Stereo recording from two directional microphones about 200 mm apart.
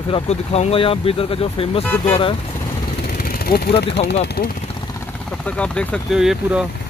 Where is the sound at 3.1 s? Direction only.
50° left (ahead or behind).